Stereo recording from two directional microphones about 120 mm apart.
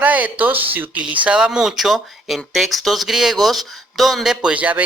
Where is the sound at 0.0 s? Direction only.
15° right (ahead or behind).